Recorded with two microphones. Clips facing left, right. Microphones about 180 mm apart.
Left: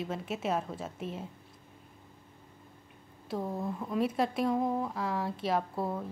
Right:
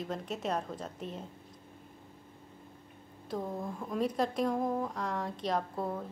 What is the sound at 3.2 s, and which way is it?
Speech, 5° left (ahead or behind).